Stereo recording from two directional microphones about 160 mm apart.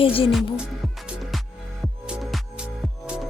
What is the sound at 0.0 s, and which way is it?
Speech, 35° left (ahead or behind).